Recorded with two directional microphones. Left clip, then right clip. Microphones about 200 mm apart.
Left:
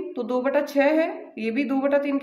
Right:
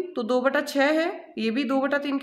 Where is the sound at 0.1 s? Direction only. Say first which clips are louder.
Even; 30° right (ahead or behind).